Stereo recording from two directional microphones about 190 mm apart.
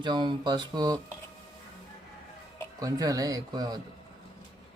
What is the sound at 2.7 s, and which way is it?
Speech, 20° right (ahead or behind).